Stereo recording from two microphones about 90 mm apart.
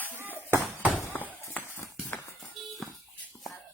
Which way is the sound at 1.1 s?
20° left (ahead or behind).